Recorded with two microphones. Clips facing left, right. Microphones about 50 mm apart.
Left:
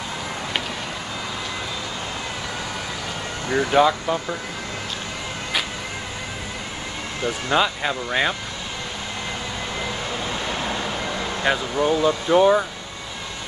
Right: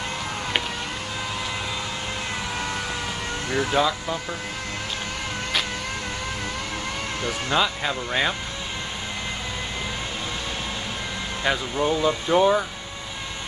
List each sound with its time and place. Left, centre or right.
3.4 s speech: centre
7.5 s speech: centre
11.4 s speech: centre